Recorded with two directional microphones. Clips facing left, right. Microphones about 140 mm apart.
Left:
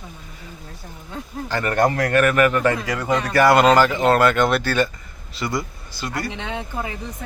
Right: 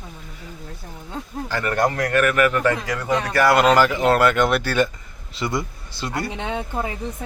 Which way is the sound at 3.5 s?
5° right (ahead or behind).